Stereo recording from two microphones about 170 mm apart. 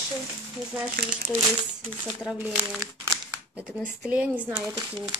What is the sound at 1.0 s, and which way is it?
Speech, 75° right (ahead or behind).